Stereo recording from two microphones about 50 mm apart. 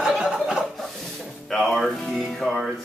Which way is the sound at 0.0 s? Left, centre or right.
Centre.